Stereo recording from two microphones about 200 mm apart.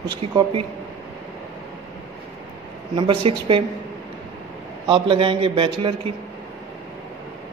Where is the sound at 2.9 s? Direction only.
25° right (ahead or behind).